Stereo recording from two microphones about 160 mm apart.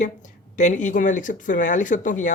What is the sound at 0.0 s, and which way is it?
Speech, 50° left (ahead or behind).